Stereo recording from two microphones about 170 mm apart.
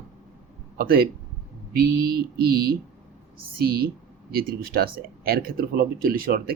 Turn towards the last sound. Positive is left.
turn(degrees=-60)  # may be behind; listen again after turning